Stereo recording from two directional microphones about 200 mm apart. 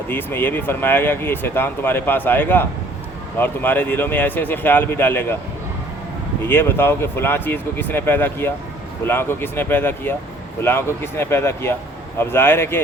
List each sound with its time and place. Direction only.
0.1 s speech: 10° left (ahead or behind)
6.4 s speech: 10° left (ahead or behind)